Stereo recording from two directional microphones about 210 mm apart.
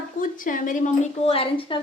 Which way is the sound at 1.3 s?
25° left (ahead or behind).